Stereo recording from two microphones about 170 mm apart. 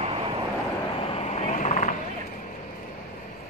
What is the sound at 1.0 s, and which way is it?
Vehicle, 35° left (ahead or behind).